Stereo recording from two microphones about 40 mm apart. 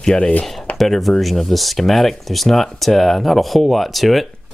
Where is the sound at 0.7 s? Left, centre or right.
Centre.